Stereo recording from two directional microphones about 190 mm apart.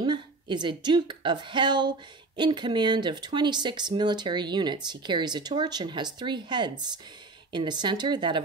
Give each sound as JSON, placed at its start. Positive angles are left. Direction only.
{"t": 0.0, "sound": "a woman's voice", "side_deg": -25}